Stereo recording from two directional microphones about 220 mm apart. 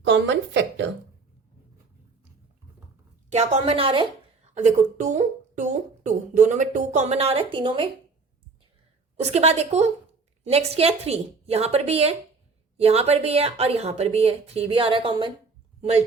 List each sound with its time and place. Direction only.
0.0 s a sound: 55° right (ahead or behind)
3.2 s a woman's voice: 30° right (ahead or behind)
9.2 s speech: 30° right (ahead or behind)